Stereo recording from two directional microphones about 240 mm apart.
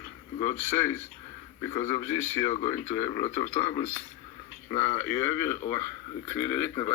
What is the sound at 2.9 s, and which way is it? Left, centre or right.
A man's voice, centre.